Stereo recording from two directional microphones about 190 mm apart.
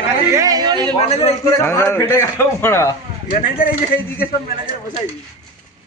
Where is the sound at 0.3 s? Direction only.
20° right (ahead or behind).